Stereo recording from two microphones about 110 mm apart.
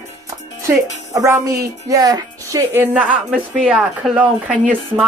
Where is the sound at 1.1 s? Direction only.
30° right (ahead or behind).